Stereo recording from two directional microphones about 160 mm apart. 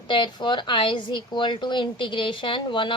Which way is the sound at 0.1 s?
30° left (ahead or behind).